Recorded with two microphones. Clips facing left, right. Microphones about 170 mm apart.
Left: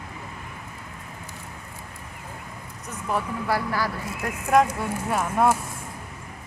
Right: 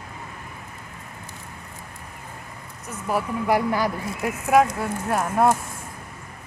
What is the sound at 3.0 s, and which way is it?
Speech, 15° right (ahead or behind).